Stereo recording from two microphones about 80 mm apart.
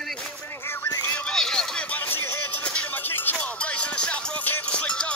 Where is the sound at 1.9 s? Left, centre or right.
Left.